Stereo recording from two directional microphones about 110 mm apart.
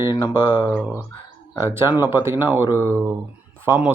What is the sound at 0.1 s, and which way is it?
Mantra, 40° left (ahead or behind).